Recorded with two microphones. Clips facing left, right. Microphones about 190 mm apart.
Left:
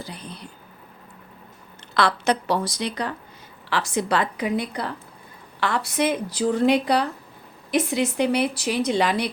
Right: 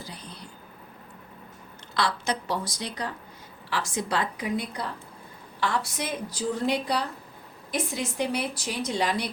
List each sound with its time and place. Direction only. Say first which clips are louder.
2.0 s a woman's voice: left 6 dB; 65° left (ahead or behind)